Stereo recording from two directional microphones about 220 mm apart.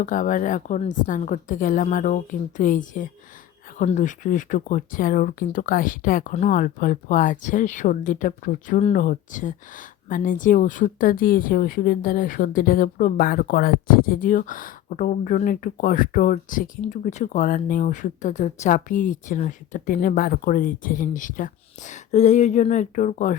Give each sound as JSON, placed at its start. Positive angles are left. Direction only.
{"t": 0.0, "sound": "speech", "side_deg": 35}